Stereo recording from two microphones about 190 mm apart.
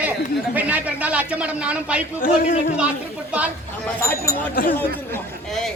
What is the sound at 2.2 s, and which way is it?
Speech, 45° left (ahead or behind).